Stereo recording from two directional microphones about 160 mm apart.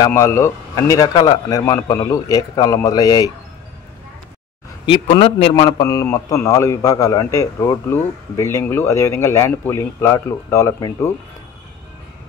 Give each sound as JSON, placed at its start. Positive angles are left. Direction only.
{"t": 0.0, "sound": "a man's voice", "side_deg": 15}
{"t": 5.0, "sound": "a man's voice", "side_deg": 45}
{"t": 5.5, "sound": "a man's voice", "side_deg": 25}